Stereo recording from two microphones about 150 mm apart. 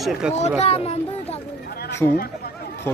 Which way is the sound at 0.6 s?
45° left (ahead or behind).